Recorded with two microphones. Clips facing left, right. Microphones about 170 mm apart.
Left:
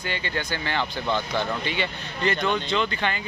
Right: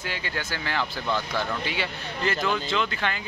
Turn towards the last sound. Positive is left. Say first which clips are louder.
# left 2 dB
turn(degrees=0)  # may be behind; listen again after turning